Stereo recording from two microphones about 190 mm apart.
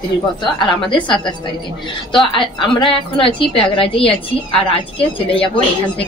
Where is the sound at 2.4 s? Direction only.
25° left (ahead or behind).